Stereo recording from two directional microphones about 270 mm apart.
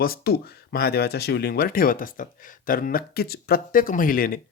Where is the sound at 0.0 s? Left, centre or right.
Left.